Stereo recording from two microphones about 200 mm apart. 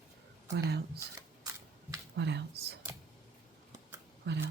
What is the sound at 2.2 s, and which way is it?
Speech, 55° right (ahead or behind).